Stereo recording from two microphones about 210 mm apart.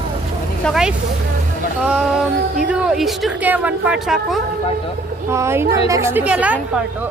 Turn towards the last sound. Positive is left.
turn(degrees=-5)  # may be behind; listen again after turning